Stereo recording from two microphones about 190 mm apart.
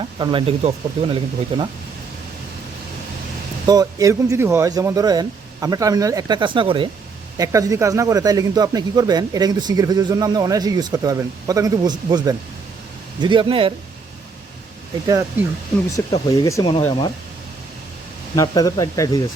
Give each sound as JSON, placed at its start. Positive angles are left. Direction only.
{"t": 0.2, "sound": "speech", "side_deg": -25}
{"t": 3.7, "sound": "speech", "side_deg": -20}
{"t": 15.0, "sound": "speech", "side_deg": -15}
{"t": 16.0, "sound": "speech", "side_deg": 15}
{"t": 18.3, "sound": "speech", "side_deg": 20}